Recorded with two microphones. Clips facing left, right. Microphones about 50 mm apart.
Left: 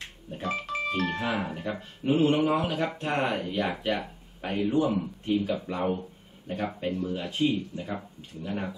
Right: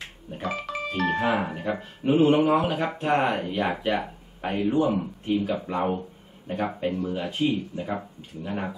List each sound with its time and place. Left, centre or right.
0.3 s music: centre
0.9 s speech: centre